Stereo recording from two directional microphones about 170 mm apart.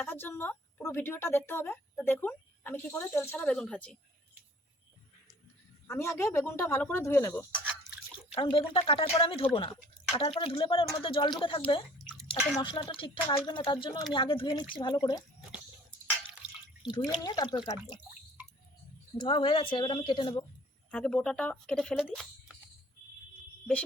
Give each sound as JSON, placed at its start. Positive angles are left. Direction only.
{"t": 0.0, "sound": "speech", "side_deg": 10}
{"t": 5.9, "sound": "speech", "side_deg": 15}
{"t": 8.3, "sound": "speech", "side_deg": 30}
{"t": 12.6, "sound": "speech", "side_deg": 30}
{"t": 17.1, "sound": "speech", "side_deg": 25}
{"t": 19.1, "sound": "speech", "side_deg": 25}
{"t": 20.9, "sound": "speech", "side_deg": 5}